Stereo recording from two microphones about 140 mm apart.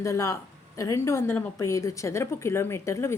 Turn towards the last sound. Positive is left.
turn(degrees=20)  # may be behind; listen again after turning